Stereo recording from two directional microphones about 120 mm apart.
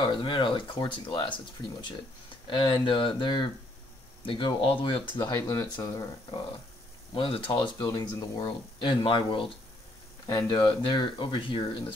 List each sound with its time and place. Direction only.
0.0 s speech: 40° left (ahead or behind)
2.4 s speech: 45° left (ahead or behind); by 6.0 s 25° left (ahead or behind)
7.2 s speech: 45° left (ahead or behind)
8.7 s speech: 45° left (ahead or behind)
10.2 s speech: 30° left (ahead or behind)
10.6 s speech: 45° left (ahead or behind)